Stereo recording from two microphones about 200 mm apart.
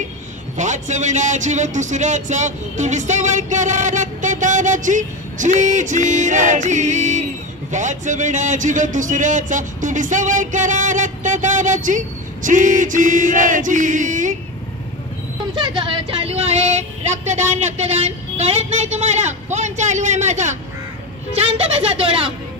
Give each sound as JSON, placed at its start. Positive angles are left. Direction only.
{"t": 0.6, "sound": "speech", "side_deg": -35}
{"t": 15.5, "sound": "a woman's voice", "side_deg": -25}